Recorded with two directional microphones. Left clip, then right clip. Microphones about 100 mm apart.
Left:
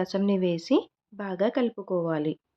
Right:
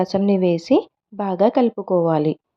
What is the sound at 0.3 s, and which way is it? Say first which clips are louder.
A woman's voice: right 8 dB; 40° right (ahead or behind).